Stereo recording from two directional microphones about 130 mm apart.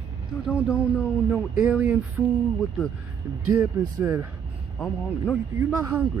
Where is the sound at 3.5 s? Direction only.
20° right (ahead or behind).